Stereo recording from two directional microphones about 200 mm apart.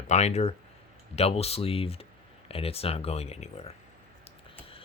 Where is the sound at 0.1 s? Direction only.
35° left (ahead or behind).